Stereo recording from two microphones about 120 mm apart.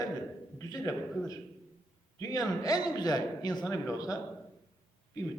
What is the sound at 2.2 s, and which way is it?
A man's voice, 30° left (ahead or behind).